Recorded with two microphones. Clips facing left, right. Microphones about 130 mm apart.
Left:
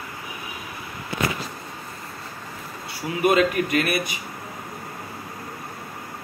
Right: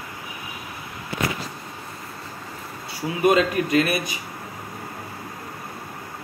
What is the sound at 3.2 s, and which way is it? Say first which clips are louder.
Speech: even; 30° right (ahead or behind).